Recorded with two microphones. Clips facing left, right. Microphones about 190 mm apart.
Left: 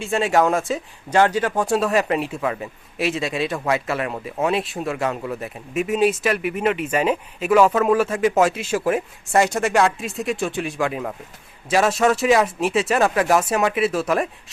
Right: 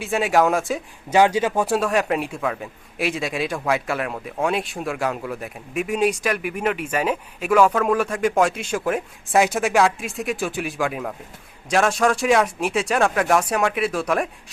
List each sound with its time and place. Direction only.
0.0 s a man's voice: centre (ahead or behind)